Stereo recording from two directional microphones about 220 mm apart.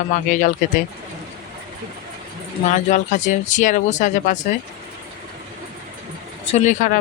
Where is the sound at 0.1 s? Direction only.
35° left (ahead or behind).